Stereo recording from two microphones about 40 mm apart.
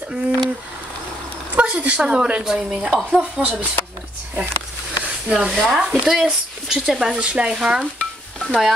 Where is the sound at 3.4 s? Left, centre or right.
Right.